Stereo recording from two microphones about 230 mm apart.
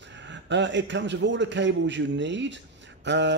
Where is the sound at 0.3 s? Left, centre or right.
Right.